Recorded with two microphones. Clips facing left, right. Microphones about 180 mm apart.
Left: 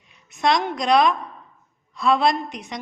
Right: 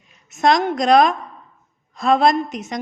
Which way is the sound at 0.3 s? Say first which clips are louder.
Right 4 dB; 45° right (ahead or behind).